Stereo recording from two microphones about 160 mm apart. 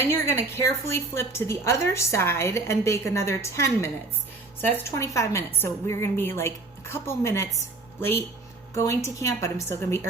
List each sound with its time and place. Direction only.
0.0 s a woman's voice: 15° left (ahead or behind)
8.7 s a woman's voice: 20° left (ahead or behind)